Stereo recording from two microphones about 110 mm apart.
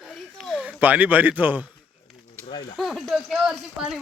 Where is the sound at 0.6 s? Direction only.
15° right (ahead or behind).